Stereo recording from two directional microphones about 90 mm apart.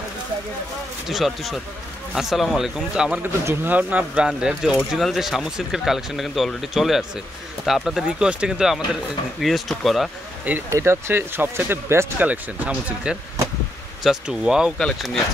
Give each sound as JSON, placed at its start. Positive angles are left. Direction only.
{"t": 1.0, "sound": "speech", "side_deg": 0}
{"t": 3.2, "sound": "speech", "side_deg": -20}
{"t": 10.7, "sound": "speech", "side_deg": -30}